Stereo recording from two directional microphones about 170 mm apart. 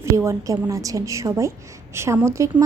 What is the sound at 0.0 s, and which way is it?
A woman's voice, 15° right (ahead or behind).